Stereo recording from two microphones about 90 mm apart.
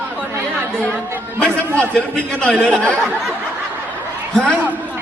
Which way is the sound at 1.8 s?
10° left (ahead or behind).